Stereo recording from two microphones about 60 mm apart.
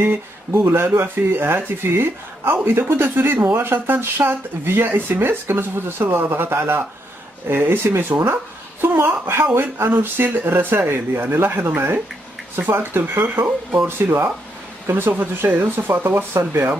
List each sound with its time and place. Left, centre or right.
0.0 s speech: right